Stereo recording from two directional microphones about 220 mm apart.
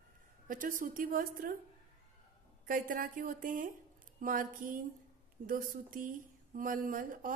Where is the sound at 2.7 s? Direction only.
40° right (ahead or behind).